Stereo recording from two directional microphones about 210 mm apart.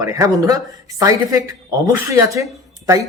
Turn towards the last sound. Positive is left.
turn(degrees=-15)  # may be behind; listen again after turning